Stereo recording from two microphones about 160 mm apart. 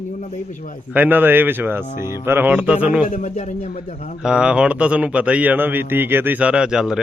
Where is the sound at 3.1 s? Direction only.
50° left (ahead or behind).